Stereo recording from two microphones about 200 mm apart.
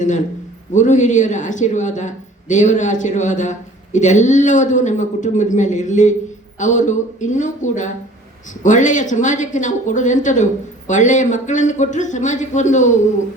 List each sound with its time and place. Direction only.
0.7 s speech: 40° left (ahead or behind)